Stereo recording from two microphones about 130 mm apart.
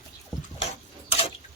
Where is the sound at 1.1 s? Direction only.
50° left (ahead or behind).